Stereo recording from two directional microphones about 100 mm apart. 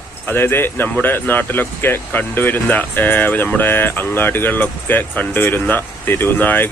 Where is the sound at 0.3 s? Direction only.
20° left (ahead or behind).